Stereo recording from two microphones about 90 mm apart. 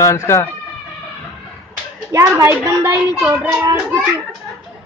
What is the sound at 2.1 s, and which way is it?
A child's voice, 30° right (ahead or behind).